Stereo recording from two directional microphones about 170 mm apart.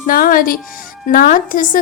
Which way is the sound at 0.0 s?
55° left (ahead or behind).